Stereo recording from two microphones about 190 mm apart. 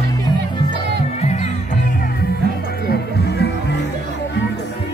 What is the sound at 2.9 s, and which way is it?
Music, 60° left (ahead or behind).